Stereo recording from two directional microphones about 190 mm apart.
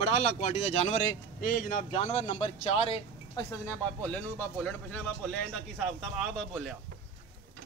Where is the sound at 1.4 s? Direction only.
45° left (ahead or behind); by 3.0 s 30° left (ahead or behind).